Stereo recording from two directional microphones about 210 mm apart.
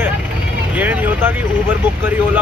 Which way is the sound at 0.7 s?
5° right (ahead or behind).